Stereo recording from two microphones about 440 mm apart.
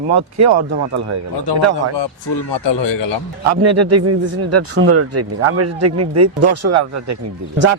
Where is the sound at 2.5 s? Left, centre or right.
Left.